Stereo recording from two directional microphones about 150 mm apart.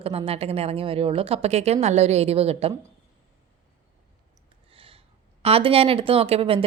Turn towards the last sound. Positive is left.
turn(degrees=-40)  # may be behind; listen again after turning